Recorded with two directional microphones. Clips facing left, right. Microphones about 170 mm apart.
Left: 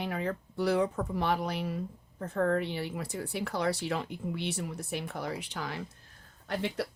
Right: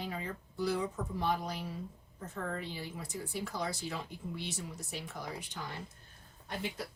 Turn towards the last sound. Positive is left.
turn(degrees=75)  # may be behind; listen again after turning